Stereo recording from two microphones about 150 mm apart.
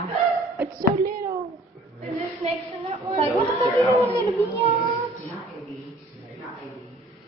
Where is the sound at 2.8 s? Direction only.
40° right (ahead or behind).